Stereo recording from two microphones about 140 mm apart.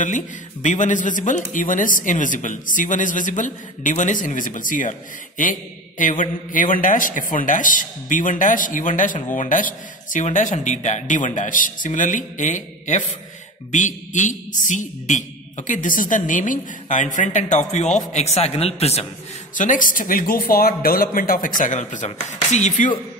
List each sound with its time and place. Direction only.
0.0 s speech: 65° left (ahead or behind); by 19.0 s 50° left (ahead or behind)
19.5 s speech: 65° left (ahead or behind)